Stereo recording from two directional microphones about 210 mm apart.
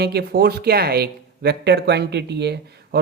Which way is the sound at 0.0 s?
50° right (ahead or behind).